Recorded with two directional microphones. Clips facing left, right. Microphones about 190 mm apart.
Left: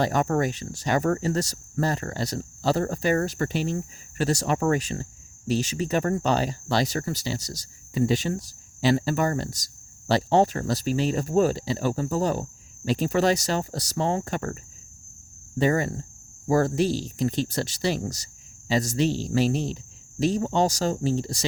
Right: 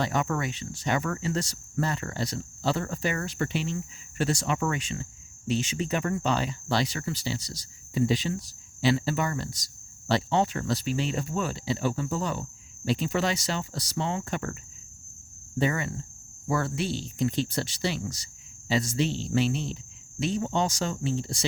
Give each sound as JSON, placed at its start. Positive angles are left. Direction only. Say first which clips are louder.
{"t": 0.0, "sound": "speech", "louder": "left 5 dB", "side_deg": 40}
{"t": 15.7, "sound": "speech", "louder": "left 7 dB", "side_deg": 40}